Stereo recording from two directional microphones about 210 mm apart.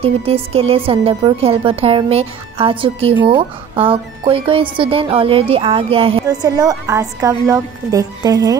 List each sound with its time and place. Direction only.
0.0 s a woman's voice: 30° right (ahead or behind)